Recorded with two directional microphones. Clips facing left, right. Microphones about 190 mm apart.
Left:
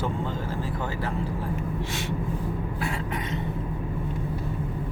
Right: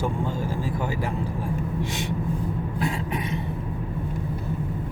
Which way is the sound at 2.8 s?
15° right (ahead or behind).